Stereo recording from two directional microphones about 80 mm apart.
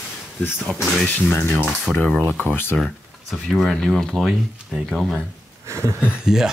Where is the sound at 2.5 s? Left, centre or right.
Left.